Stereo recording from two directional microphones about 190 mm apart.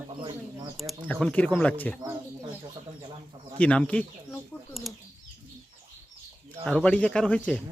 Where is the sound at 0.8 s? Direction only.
5° left (ahead or behind).